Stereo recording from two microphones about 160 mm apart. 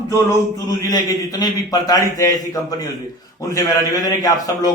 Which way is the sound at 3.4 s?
20° left (ahead or behind).